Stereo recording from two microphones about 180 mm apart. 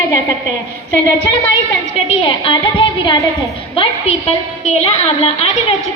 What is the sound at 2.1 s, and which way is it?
A woman's voice, 30° left (ahead or behind).